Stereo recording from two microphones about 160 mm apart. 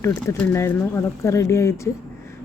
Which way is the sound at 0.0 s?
10° left (ahead or behind).